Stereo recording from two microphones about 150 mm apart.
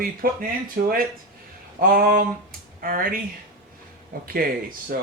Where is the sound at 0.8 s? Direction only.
90° right.